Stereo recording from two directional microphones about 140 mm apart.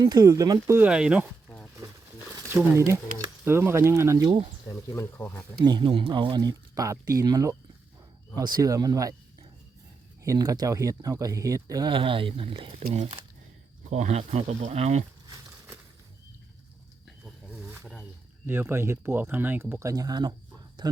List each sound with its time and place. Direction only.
0.0 s speech: 25° right (ahead or behind)
0.8 s speech: 5° right (ahead or behind)
1.5 s a sound: 10° left (ahead or behind)
2.5 s speech: 20° right (ahead or behind)
4.7 s speech: 20° left (ahead or behind)
5.6 s speech: 35° right (ahead or behind)
15.3 s a sound: 20° right (ahead or behind)
17.1 s wild animals: centre (ahead or behind)
18.4 s speech: 15° right (ahead or behind)
19.9 s speech: 25° right (ahead or behind)